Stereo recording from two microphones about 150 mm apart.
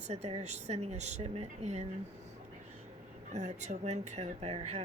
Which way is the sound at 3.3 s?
50° right (ahead or behind).